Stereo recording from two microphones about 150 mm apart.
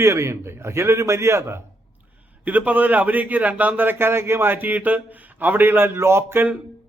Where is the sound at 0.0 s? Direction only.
20° right (ahead or behind).